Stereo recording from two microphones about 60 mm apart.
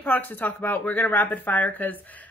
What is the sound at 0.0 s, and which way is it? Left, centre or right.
Speech, left.